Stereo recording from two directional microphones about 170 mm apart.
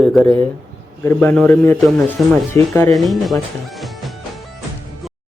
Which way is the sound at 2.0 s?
10° left (ahead or behind).